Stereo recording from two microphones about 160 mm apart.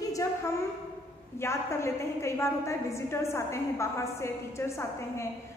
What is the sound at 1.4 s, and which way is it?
A woman's voice, 15° left (ahead or behind).